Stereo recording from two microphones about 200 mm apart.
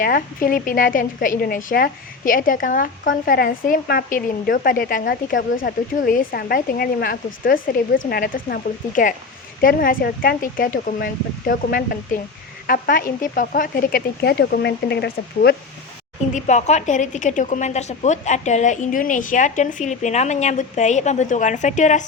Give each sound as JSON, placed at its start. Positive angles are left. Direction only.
{"t": 0.0, "sound": "a woman's voice", "side_deg": 45}
{"t": 16.3, "sound": "a woman's voice", "side_deg": 35}